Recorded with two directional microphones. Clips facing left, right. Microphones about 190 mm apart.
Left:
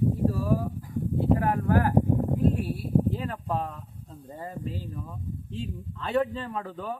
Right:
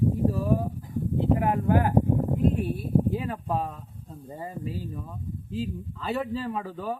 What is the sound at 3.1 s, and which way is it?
Speech, 10° right (ahead or behind).